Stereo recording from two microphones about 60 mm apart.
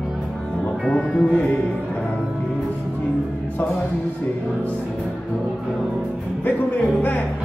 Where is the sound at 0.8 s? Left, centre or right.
Centre.